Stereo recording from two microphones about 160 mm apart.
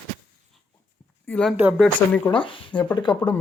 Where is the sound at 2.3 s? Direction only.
30° left (ahead or behind).